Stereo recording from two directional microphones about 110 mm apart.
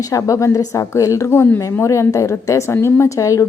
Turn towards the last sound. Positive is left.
turn(degrees=30)  # may be behind; listen again after turning